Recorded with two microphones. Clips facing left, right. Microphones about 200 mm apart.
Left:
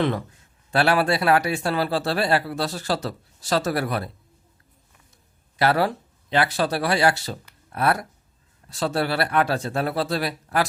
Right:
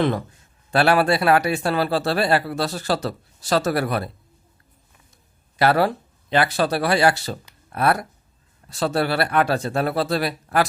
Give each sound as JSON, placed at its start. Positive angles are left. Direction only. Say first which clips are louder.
{"t": 0.7, "sound": "speech", "louder": "right 3 dB", "side_deg": -55}
{"t": 5.5, "sound": "speech", "louder": "right 2 dB", "side_deg": -55}